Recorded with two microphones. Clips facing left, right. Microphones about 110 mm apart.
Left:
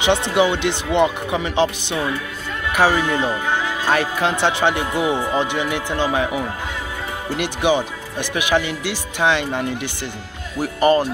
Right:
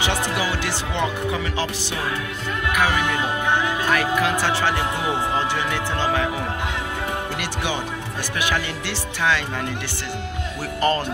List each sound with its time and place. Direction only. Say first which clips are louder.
0.0 s speech: left 7 dB; 20° left (ahead or behind)